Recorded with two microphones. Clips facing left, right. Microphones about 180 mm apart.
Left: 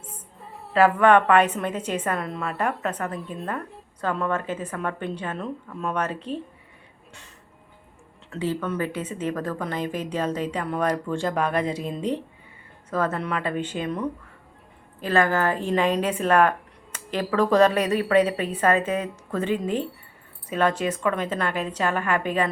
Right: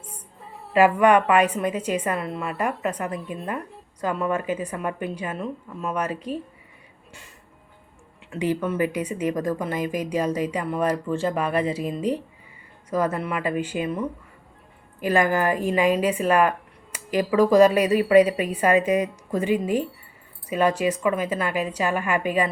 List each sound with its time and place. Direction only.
0.0 s a sound: centre (ahead or behind)
0.7 s a woman's voice: 10° right (ahead or behind)
8.3 s a woman's voice: 15° right (ahead or behind)